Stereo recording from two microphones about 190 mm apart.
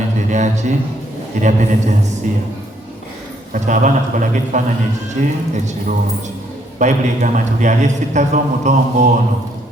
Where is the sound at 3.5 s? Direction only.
40° right (ahead or behind).